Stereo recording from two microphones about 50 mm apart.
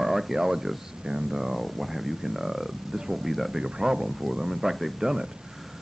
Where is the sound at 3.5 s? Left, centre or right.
Centre.